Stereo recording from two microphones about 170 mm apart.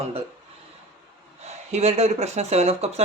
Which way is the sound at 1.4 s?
40° right (ahead or behind).